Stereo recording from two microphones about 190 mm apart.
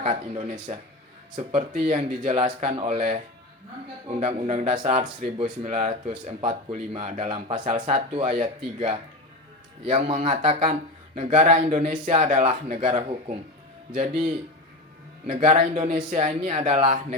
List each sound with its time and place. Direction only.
0.0 s speech: 35° right (ahead or behind)
4.2 s speech: 35° right (ahead or behind)
15.3 s speech: 30° right (ahead or behind)
15.6 s speech: 40° right (ahead or behind)